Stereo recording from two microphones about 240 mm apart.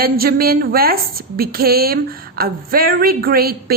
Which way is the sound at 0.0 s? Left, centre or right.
Right.